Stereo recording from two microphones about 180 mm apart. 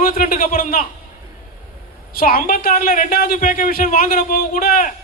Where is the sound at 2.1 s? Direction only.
55° left (ahead or behind).